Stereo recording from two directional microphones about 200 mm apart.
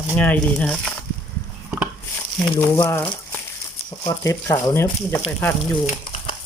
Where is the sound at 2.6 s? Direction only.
10° left (ahead or behind).